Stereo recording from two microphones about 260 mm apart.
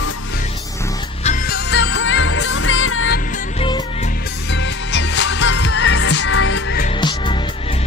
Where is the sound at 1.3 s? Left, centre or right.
Left.